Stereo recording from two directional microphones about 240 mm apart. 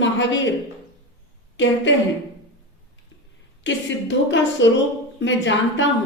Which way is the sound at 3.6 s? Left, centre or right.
Left.